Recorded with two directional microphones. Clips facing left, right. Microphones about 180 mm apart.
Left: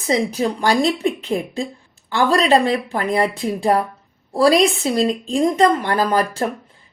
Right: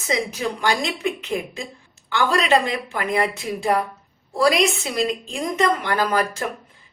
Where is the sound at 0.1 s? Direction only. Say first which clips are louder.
Left 5 dB; 35° left (ahead or behind).